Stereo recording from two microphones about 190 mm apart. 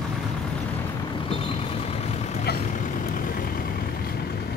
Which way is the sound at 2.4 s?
50° left (ahead or behind).